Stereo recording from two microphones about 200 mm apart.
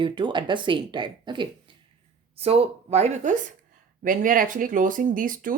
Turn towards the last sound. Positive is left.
turn(degrees=-45)  # may be behind; listen again after turning